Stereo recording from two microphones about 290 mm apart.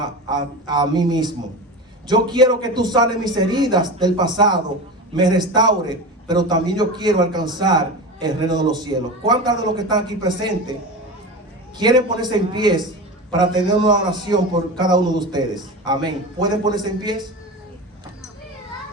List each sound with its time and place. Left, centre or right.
0.0 s a man's voice: centre
11.8 s a man's voice: centre